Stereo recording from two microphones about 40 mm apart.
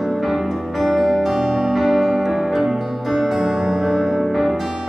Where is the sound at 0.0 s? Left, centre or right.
Centre.